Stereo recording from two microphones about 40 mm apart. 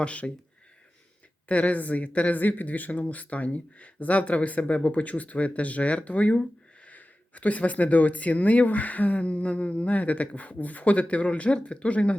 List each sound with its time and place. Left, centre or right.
0.0 s speech: left
1.5 s speech: left
2.4 s speech: left